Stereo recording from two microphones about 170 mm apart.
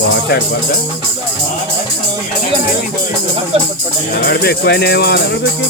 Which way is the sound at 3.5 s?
35° right (ahead or behind).